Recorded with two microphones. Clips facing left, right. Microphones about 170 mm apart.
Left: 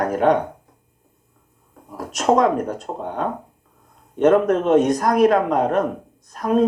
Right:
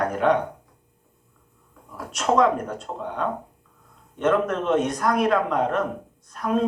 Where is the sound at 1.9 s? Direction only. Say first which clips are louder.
Left 3 dB; 40° left (ahead or behind).